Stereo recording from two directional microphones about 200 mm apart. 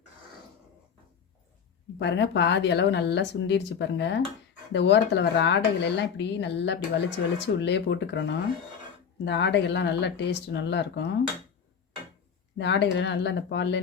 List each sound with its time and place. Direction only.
2.0 s speech: 60° left (ahead or behind)
12.5 s speech: 60° left (ahead or behind)